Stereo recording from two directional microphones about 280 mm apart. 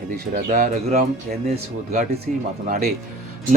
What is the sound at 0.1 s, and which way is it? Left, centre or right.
Speech, right.